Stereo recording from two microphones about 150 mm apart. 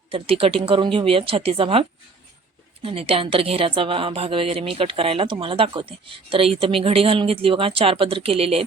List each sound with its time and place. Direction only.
0.1 s a woman's voice: 40° right (ahead or behind)
2.8 s a woman's voice: 40° right (ahead or behind)